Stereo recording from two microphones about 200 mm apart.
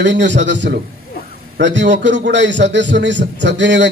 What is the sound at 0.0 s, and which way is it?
A man's voice, 60° right (ahead or behind).